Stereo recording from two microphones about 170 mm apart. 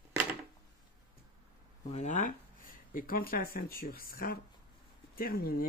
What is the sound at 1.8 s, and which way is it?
Speech, 40° left (ahead or behind).